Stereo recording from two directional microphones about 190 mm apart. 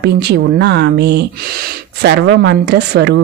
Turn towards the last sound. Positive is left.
turn(degrees=-60)  # may be behind; listen again after turning